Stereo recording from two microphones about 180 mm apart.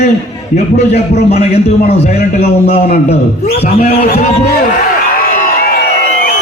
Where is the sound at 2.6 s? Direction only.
60° left (ahead or behind).